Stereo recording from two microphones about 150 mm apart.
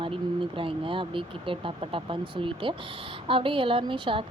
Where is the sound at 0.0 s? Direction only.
35° right (ahead or behind).